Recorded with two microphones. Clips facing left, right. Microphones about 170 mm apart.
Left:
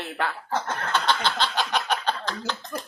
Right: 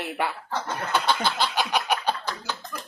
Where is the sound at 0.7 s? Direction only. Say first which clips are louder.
Right 3 dB; 10° right (ahead or behind).